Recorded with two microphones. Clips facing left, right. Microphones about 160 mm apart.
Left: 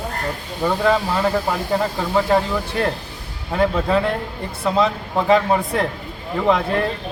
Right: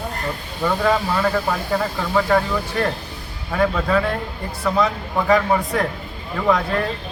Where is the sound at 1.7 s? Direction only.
20° left (ahead or behind).